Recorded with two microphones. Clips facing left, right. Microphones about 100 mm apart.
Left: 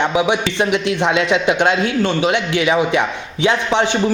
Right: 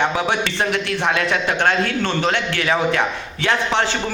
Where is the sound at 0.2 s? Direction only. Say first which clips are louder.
Left 4 dB; 15° left (ahead or behind).